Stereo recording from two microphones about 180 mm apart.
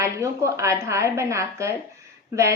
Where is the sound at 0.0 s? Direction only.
15° right (ahead or behind).